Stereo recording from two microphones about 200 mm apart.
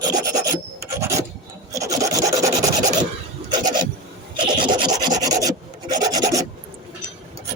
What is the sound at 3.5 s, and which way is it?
Filing, 20° right (ahead or behind).